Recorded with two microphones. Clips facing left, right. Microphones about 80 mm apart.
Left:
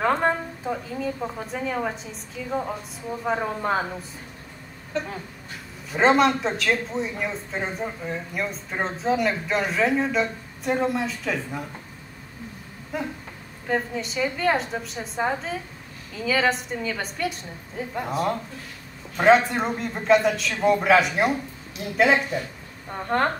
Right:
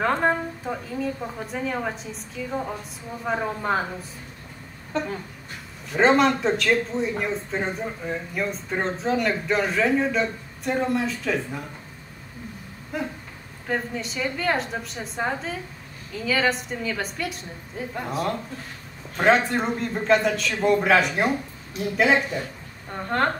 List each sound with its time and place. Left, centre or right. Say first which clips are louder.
0.0 s speech: even; centre
5.9 s speech: even; centre
13.7 s speech: left 2 dB; centre